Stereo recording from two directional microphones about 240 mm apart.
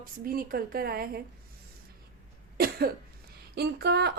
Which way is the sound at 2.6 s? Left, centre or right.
Right.